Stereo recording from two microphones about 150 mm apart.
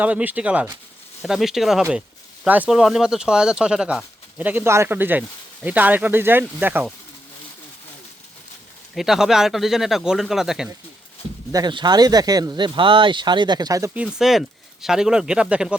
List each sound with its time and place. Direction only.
0.0 s speech: 10° right (ahead or behind)
9.0 s speech: centre (ahead or behind)
11.5 s speech: 30° right (ahead or behind)
14.2 s speech: centre (ahead or behind)